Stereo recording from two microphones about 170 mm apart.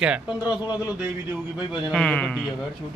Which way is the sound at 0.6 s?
25° left (ahead or behind).